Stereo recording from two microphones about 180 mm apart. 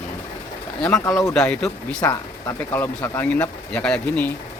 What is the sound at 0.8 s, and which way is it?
Speech, 5° left (ahead or behind).